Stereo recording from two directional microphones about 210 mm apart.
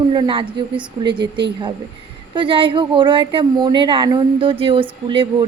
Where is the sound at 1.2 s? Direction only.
55° right (ahead or behind).